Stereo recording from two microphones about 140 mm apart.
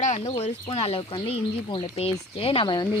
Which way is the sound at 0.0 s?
50° left (ahead or behind).